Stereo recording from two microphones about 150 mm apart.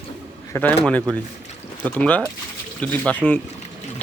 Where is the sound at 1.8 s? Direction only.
10° left (ahead or behind).